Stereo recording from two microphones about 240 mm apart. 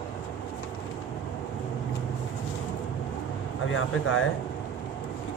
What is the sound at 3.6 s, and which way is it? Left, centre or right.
Speech, left.